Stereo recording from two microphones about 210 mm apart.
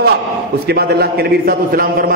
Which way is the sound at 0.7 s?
50° right (ahead or behind).